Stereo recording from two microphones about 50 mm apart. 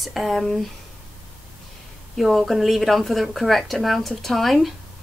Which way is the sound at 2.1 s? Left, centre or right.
Centre.